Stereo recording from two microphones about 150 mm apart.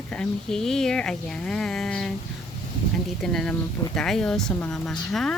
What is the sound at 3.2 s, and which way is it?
Speech, 5° left (ahead or behind).